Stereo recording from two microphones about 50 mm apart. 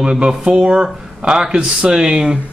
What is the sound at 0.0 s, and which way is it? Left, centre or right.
Speech, centre.